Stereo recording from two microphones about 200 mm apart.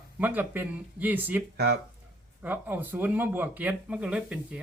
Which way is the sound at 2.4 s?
10° right (ahead or behind).